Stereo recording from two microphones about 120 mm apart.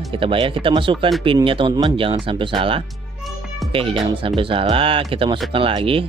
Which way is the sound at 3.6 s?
50° right (ahead or behind).